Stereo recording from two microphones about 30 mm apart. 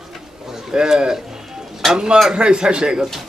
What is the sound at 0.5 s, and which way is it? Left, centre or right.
A man's voice, right.